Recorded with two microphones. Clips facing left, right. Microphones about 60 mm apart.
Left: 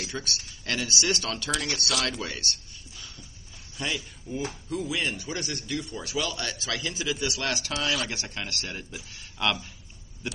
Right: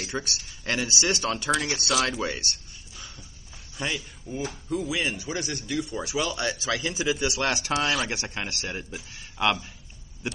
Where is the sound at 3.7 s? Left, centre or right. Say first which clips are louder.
Right 1 dB; centre.